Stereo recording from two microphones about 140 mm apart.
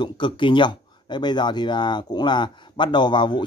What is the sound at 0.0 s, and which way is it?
Speech, 35° left (ahead or behind).